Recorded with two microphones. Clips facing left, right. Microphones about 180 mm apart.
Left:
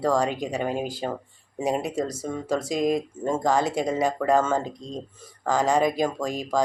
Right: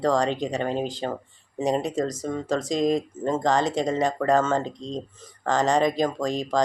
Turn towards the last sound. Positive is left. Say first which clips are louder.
# right 2 dB
turn(degrees=5)  # may be behind; listen again after turning